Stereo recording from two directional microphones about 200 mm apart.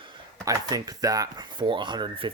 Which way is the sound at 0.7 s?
20° right (ahead or behind).